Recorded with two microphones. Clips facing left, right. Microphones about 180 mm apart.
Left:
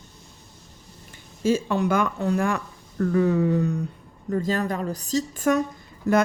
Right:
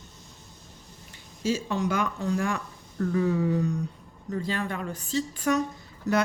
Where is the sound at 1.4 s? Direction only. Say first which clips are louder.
Left 5 dB; 55° left (ahead or behind).